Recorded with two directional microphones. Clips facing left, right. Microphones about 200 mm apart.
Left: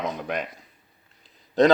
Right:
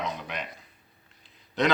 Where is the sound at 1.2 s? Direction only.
40° left (ahead or behind).